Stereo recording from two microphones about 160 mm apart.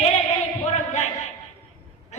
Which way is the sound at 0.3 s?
45° left (ahead or behind).